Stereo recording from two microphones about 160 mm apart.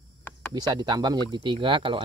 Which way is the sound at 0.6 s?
30° right (ahead or behind).